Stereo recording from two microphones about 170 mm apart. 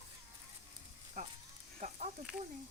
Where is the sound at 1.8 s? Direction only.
45° right (ahead or behind).